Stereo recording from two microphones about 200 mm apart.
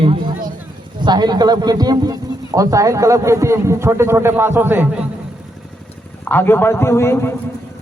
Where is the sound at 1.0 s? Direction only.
20° right (ahead or behind).